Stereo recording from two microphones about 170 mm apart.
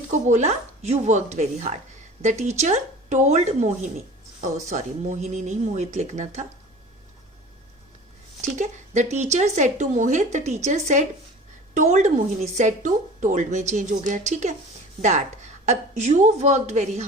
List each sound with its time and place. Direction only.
0.1 s a woman's voice: 45° right (ahead or behind)
8.4 s a woman's voice: 45° right (ahead or behind)
15.6 s a woman's voice: 40° right (ahead or behind)